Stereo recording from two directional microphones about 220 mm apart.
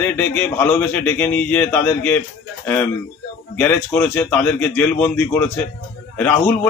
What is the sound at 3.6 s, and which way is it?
A man's voice, 5° left (ahead or behind).